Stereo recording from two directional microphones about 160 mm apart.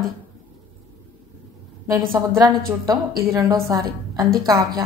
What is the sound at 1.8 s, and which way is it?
A woman's voice, 15° right (ahead or behind).